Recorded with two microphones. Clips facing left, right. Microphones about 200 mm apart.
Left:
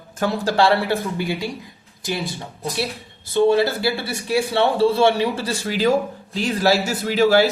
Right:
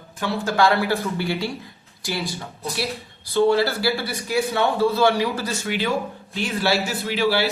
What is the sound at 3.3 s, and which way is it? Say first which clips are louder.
Speech: left 2 dB; 20° left (ahead or behind).